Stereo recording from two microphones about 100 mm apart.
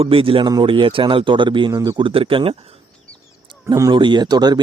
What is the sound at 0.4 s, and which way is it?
Speech, 50° right (ahead or behind).